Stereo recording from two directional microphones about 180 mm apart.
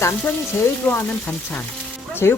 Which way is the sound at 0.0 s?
15° left (ahead or behind).